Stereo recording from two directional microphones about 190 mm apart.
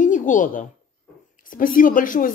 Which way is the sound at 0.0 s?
40° left (ahead or behind).